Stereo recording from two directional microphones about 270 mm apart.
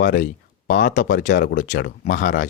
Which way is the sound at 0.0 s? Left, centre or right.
Left.